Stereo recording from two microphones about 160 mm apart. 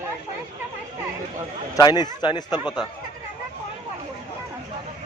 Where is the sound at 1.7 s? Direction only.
25° left (ahead or behind).